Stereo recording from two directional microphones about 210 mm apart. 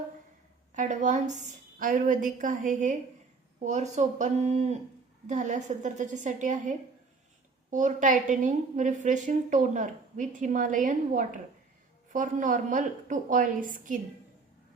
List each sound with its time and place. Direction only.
0.7 s a woman's voice: 35° right (ahead or behind)